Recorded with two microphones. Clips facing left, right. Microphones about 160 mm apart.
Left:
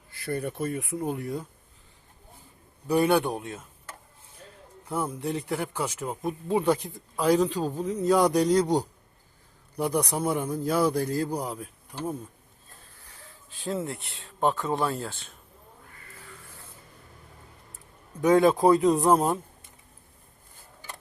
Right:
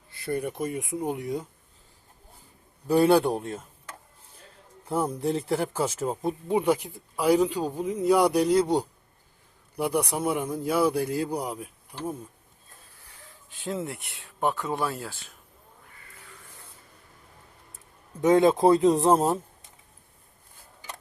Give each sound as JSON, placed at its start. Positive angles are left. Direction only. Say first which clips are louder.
{"t": 0.1, "sound": "a man's voice", "louder": "right 1 dB", "side_deg": -15}
{"t": 3.0, "sound": "speech", "louder": "right 4 dB", "side_deg": -35}
{"t": 5.0, "sound": "speech", "louder": "right 3 dB", "side_deg": -30}
{"t": 6.5, "sound": "a man's voice", "louder": "even", "side_deg": -10}
{"t": 13.2, "sound": "a sound", "louder": "left 1 dB", "side_deg": -15}
{"t": 13.8, "sound": "a man's voice", "louder": "left 1 dB", "side_deg": -15}
{"t": 14.5, "sound": "speech", "louder": "left 2 dB", "side_deg": 15}
{"t": 14.8, "sound": "speech", "louder": "left 2 dB", "side_deg": -10}
{"t": 18.2, "sound": "speech", "louder": "right 1 dB", "side_deg": -20}